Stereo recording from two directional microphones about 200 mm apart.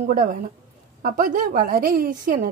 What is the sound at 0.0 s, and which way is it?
A woman's voice, 40° right (ahead or behind).